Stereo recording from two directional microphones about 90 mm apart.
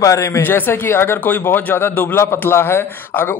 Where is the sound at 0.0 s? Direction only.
35° left (ahead or behind).